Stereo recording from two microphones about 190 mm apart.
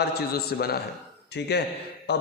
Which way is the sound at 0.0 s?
55° left (ahead or behind).